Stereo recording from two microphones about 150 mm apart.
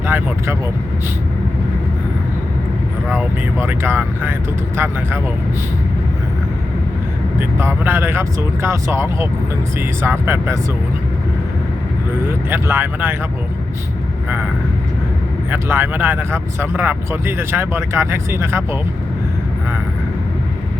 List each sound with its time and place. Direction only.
0.1 s speech: 10° right (ahead or behind)
3.1 s speech: 10° right (ahead or behind)
7.3 s speech: 15° right (ahead or behind)
12.2 s speech: 15° right (ahead or behind)
15.4 s speech: 15° right (ahead or behind)